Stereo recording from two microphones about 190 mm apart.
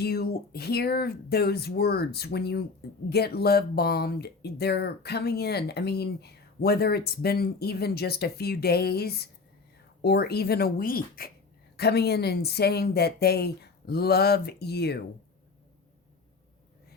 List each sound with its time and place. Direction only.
0.0 s speech: 55° left (ahead or behind)